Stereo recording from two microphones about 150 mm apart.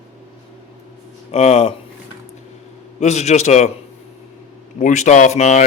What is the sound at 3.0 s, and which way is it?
Speech, 50° left (ahead or behind).